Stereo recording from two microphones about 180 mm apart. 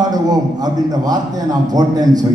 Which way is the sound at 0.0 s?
20° right (ahead or behind).